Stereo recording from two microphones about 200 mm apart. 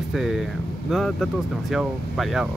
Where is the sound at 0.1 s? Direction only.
Centre (ahead or behind).